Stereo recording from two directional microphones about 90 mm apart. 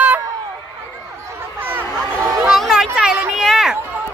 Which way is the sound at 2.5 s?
5° right (ahead or behind).